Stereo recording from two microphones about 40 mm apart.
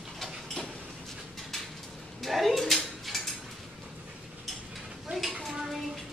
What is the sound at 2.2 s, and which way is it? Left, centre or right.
Speech, centre.